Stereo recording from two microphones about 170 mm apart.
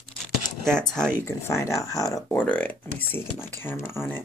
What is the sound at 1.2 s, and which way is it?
Speech, 15° left (ahead or behind).